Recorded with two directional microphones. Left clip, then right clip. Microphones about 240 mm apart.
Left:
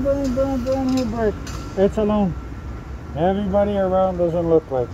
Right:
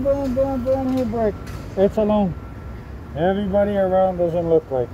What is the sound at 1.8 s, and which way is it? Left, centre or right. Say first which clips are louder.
Speech: right 1 dB; centre.